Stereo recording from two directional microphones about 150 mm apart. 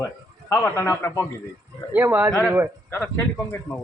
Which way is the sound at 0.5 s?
15° left (ahead or behind).